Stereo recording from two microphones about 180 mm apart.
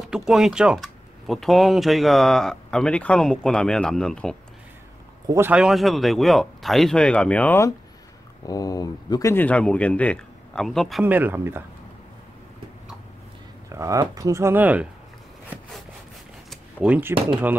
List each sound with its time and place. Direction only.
0.1 s speech: 5° right (ahead or behind)
5.3 s speech: 10° right (ahead or behind)
13.7 s speech: 20° right (ahead or behind)
16.4 s a sound: 5° right (ahead or behind)